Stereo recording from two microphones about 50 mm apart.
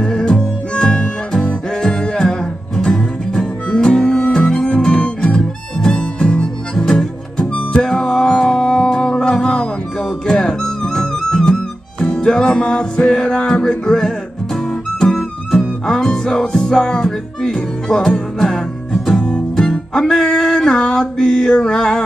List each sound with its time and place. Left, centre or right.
0.0 s harmonica: centre
1.7 s music: centre
5.9 s harmonica: centre
7.5 s music: centre